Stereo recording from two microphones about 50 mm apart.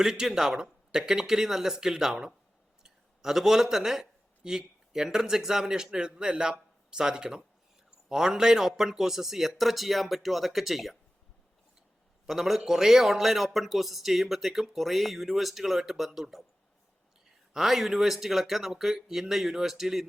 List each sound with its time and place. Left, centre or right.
0.0 s a man's voice: centre
12.2 s a man's voice: centre
17.5 s a man's voice: centre